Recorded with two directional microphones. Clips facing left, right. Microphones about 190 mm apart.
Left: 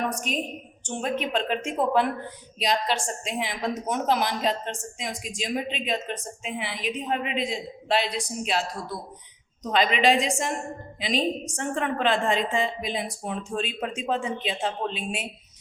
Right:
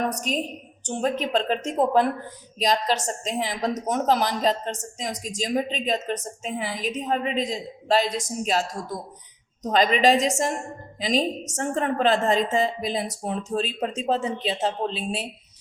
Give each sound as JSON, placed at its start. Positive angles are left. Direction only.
{"t": 0.1, "sound": "a woman's voice", "side_deg": -40}